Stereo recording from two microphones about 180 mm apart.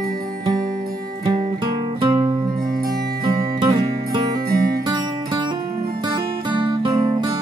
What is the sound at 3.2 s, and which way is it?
Music, 55° right (ahead or behind).